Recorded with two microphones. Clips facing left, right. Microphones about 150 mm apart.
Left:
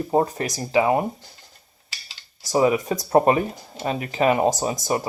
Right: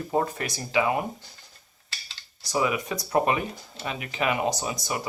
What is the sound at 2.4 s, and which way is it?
Speech, 35° left (ahead or behind).